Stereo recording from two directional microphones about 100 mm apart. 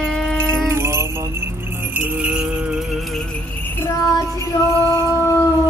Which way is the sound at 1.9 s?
15° right (ahead or behind).